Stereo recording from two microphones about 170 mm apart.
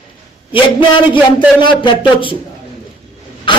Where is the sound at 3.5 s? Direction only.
30° left (ahead or behind).